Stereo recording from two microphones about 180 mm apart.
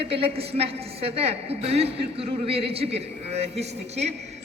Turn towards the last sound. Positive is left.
turn(degrees=-35)  # may be behind; listen again after turning